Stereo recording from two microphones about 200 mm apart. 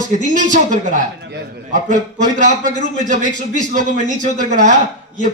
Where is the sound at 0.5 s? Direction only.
40° right (ahead or behind).